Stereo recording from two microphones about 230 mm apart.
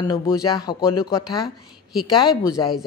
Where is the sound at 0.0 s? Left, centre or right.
Centre.